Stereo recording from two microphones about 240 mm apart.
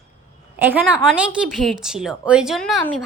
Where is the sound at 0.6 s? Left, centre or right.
Centre.